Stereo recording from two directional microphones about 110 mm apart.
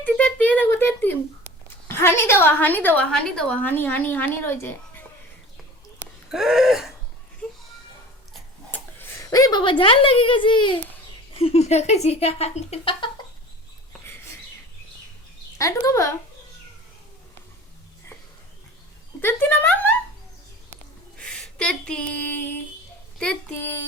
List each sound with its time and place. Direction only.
0.0 s a sound: 10° left (ahead or behind)
1.9 s a woman's voice: 20° left (ahead or behind)
6.3 s a sound: 5° right (ahead or behind)
8.7 s a sound: 20° left (ahead or behind)
9.3 s a child's voice: 40° left (ahead or behind)
11.3 s speech: 65° left (ahead or behind); by 11.9 s 85° left
12.0 s a woman's voice: 70° left (ahead or behind); by 13.1 s 55° left (ahead or behind)
15.5 s speech: 30° left (ahead or behind)
19.2 s a woman's voice: 20° left (ahead or behind)
21.2 s speech: 5° left (ahead or behind)
23.1 s speech: 5° left (ahead or behind)
23.6 s speech: 20° left (ahead or behind)